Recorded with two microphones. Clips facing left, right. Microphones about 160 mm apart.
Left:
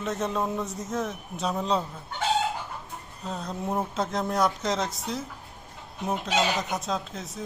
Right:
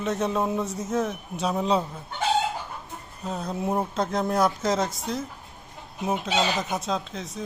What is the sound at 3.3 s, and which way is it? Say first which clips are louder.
Speech: right 3 dB; 5° right (ahead or behind).